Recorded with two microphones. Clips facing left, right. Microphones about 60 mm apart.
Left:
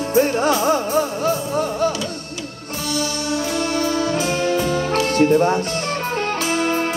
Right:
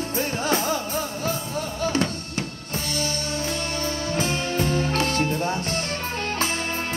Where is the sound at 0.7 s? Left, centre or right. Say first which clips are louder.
Left 8 dB; left.